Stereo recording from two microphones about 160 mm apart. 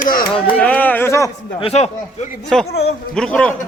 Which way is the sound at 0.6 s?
10° left (ahead or behind).